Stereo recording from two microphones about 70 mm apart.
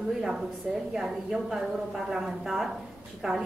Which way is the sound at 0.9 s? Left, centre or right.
Centre.